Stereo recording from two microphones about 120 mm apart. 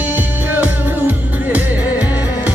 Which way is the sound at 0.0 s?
15° right (ahead or behind).